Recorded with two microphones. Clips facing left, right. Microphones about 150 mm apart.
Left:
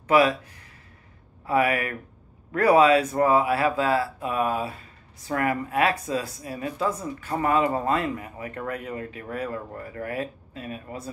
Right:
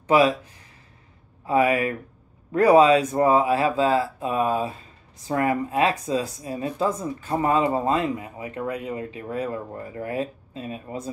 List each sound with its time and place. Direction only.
0.1 s speech: 20° right (ahead or behind)
1.4 s speech: 20° right (ahead or behind)